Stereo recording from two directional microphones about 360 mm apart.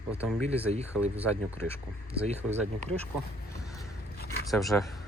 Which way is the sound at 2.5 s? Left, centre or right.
Centre.